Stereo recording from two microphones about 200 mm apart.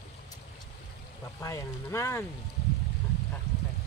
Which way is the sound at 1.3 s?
15° left (ahead or behind).